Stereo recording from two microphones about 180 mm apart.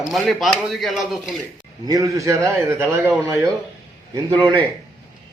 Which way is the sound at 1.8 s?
20° right (ahead or behind).